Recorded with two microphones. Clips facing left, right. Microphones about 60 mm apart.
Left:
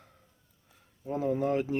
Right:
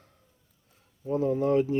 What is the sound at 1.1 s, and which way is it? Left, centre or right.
Speech, centre.